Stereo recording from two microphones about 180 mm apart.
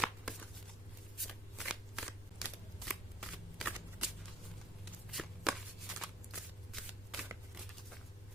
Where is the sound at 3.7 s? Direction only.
10° right (ahead or behind).